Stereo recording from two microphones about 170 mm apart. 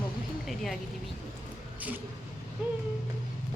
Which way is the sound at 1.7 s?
10° right (ahead or behind).